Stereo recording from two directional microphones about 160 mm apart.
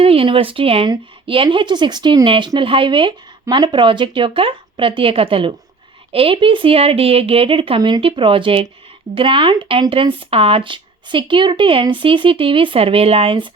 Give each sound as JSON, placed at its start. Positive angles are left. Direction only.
{"t": 0.0, "sound": "speech", "side_deg": -35}